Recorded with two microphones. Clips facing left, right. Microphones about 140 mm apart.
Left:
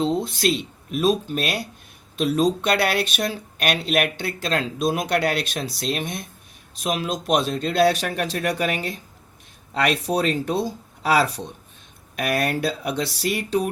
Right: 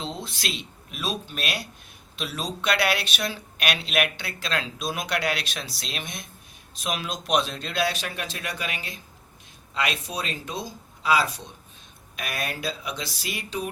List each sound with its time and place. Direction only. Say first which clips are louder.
0.0 s speech: left 12 dB; 55° left (ahead or behind); by 5.0 s 35° left (ahead or behind)
5.0 s speech: left 6 dB; 50° left (ahead or behind); by 13.6 s 65° left (ahead or behind)